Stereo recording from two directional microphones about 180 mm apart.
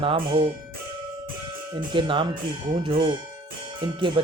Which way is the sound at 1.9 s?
30° right (ahead or behind).